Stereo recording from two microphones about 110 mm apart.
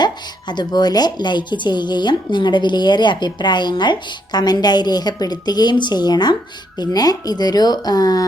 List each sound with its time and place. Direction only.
0.0 s speech: 40° left (ahead or behind)